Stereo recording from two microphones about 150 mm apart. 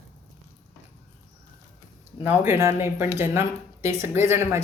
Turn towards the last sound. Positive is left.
turn(degrees=-15)  # may be behind; listen again after turning